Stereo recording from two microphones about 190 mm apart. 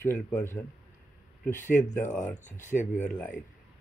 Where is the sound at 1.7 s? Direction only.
10° left (ahead or behind).